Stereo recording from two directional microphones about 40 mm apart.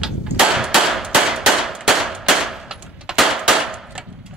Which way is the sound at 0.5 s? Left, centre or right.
Centre.